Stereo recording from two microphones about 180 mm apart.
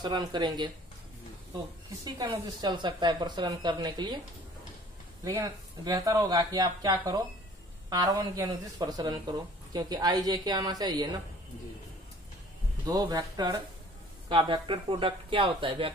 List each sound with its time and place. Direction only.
0.0 s speech: 25° right (ahead or behind)
2.0 s speech: 20° right (ahead or behind)
5.2 s speech: 20° right (ahead or behind)
12.8 s speech: 25° right (ahead or behind)